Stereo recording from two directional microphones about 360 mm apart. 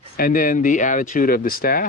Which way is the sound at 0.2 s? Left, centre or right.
Left.